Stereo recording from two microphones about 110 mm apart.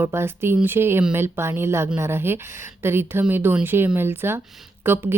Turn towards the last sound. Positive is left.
turn(degrees=-20)  # may be behind; listen again after turning